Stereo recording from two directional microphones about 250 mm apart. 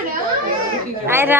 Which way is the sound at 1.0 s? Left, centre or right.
Centre.